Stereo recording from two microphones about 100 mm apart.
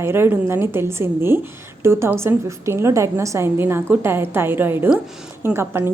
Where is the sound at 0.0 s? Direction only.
25° right (ahead or behind).